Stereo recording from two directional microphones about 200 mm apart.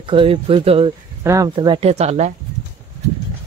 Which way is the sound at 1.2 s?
15° right (ahead or behind).